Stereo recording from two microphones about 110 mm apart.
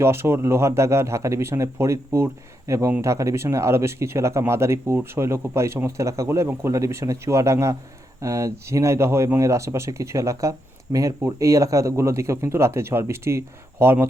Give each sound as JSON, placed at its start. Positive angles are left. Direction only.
{"t": 0.0, "sound": "speech", "side_deg": -25}